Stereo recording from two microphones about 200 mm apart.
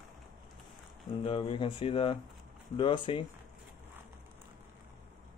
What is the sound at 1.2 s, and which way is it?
Speech, 30° left (ahead or behind).